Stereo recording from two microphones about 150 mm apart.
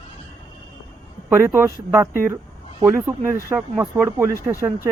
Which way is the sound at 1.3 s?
15° right (ahead or behind).